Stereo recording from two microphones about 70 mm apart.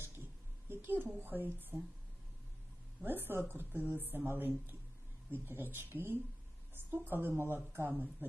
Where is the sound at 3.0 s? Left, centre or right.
Right.